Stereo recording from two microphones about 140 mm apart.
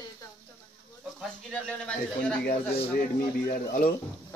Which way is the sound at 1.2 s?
5° left (ahead or behind).